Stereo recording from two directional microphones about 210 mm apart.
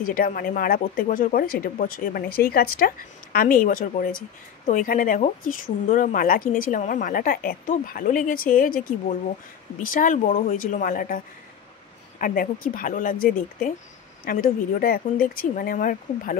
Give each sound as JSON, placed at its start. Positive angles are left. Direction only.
{"t": 0.0, "sound": "speech", "side_deg": 40}